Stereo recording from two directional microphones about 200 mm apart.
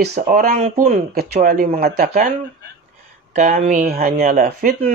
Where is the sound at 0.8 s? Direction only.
45° right (ahead or behind).